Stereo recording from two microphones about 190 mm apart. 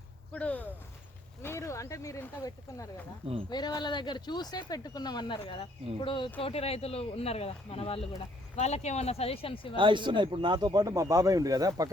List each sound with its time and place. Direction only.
0.3 s speech: 10° left (ahead or behind); by 9.7 s 30° left (ahead or behind)
9.7 s speech: 25° right (ahead or behind)